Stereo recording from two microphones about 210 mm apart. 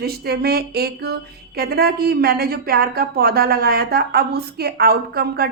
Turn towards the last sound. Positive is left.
turn(degrees=-45)  # may be behind; listen again after turning